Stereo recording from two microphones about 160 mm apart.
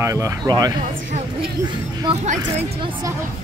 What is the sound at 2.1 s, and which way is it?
Speech, 35° right (ahead or behind).